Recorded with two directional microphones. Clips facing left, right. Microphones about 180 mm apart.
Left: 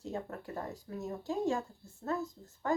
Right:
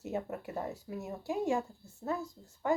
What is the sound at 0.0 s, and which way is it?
Speech, 15° right (ahead or behind).